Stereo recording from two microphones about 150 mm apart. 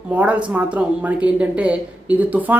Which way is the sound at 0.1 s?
10° right (ahead or behind).